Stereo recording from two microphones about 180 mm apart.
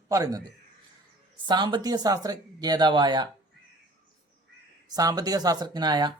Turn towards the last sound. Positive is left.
turn(degrees=-25)  # may be behind; listen again after turning